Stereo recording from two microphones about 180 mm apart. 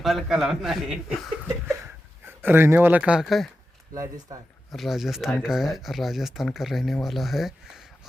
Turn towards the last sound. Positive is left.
turn(degrees=0)  # may be behind; listen again after turning